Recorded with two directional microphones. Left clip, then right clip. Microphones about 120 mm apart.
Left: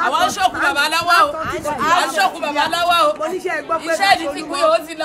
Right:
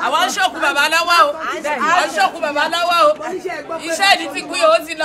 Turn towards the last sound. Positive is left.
turn(degrees=-5)  # may be behind; listen again after turning